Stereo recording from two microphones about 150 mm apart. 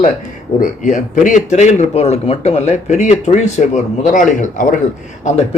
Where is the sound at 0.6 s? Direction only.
55° left (ahead or behind).